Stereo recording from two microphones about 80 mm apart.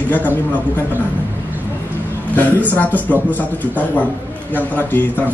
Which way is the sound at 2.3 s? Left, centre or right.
Left.